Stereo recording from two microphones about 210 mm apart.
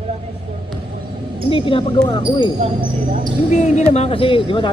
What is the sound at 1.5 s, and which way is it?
Speech, 25° left (ahead or behind).